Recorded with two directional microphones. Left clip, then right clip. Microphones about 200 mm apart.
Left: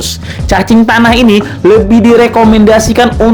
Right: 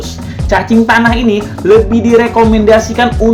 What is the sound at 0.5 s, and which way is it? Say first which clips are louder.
A man's voice: left 1 dB; 50° left (ahead or behind).